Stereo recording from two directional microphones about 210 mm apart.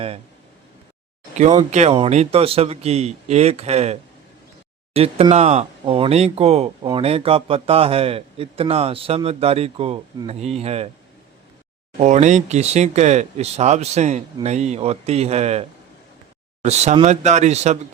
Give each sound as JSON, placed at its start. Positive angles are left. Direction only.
{"t": 1.7, "sound": "speech", "side_deg": -30}
{"t": 4.9, "sound": "speech", "side_deg": -30}
{"t": 11.9, "sound": "speech", "side_deg": -35}
{"t": 16.6, "sound": "speech", "side_deg": -30}